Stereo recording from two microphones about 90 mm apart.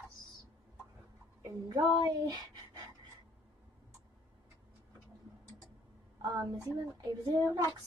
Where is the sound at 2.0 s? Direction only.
50° right (ahead or behind).